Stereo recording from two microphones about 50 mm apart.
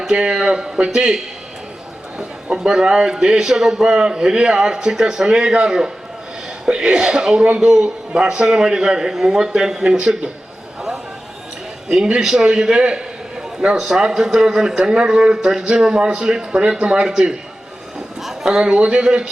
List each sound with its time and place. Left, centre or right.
0.1 s a man's voice: centre
2.6 s a man's voice: centre
11.9 s a man's voice: centre
18.2 s a sound: centre
18.6 s speech: right